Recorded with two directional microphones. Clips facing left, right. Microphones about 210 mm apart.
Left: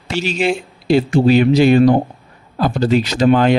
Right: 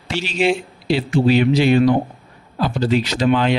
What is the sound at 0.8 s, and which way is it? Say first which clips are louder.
Speech: left 4 dB; 45° left (ahead or behind).